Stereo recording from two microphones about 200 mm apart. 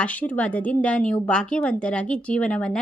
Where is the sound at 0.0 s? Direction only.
5° left (ahead or behind).